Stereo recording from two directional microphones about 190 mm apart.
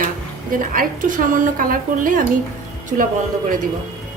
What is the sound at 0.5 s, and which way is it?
A woman's voice, 45° right (ahead or behind).